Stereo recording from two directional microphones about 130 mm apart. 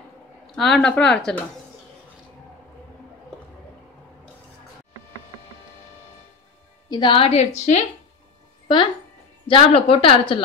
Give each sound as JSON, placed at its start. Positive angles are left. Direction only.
{"t": 0.6, "sound": "speech", "side_deg": 5}
{"t": 6.9, "sound": "a woman's voice", "side_deg": 40}
{"t": 9.5, "sound": "a woman's voice", "side_deg": 45}